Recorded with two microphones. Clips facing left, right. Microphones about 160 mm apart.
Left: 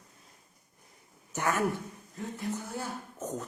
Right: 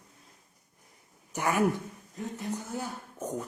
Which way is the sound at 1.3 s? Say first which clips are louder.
Right 3 dB; 10° right (ahead or behind).